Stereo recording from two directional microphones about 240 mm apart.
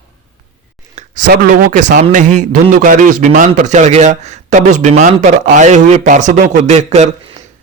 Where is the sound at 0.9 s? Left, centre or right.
Right.